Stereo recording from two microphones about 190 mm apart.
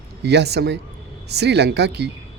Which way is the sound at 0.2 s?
60° right (ahead or behind).